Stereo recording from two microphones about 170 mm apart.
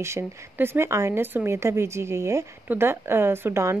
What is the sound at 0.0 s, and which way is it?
Speech, 15° right (ahead or behind).